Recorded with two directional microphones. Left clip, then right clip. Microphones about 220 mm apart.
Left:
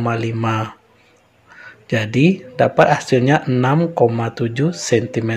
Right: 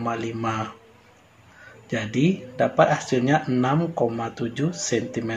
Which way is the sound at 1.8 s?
40° left (ahead or behind).